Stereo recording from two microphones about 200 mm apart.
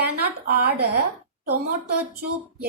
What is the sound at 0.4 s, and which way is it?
Speech, 55° right (ahead or behind).